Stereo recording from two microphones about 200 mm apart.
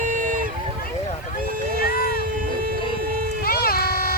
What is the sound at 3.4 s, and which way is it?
Vehicle, 50° left (ahead or behind).